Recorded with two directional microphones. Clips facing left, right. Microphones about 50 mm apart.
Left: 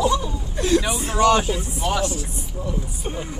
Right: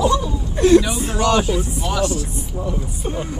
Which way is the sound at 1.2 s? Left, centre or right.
Left.